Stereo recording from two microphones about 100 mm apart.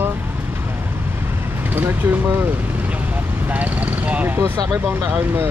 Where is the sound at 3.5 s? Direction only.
15° right (ahead or behind).